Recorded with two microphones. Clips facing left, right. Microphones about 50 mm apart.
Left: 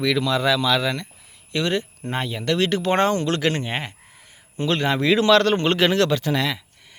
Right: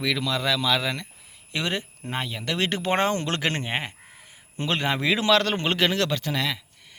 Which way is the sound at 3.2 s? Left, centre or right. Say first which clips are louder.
Left 4 dB; right.